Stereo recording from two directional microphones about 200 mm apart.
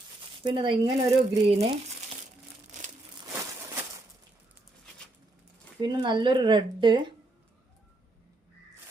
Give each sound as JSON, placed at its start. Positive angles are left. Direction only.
{"t": 0.4, "sound": "speech", "side_deg": -25}
{"t": 5.8, "sound": "speech", "side_deg": -20}